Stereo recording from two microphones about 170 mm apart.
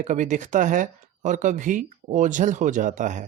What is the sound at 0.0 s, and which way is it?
Speech, 45° right (ahead or behind).